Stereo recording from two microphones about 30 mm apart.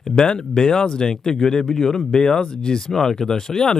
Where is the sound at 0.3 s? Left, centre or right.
Left.